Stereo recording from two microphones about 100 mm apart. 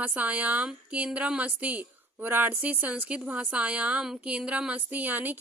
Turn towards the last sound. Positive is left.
turn(degrees=-20)  # may be behind; listen again after turning